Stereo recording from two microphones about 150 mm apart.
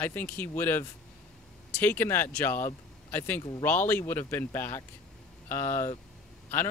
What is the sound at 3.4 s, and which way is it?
Speech, 30° left (ahead or behind).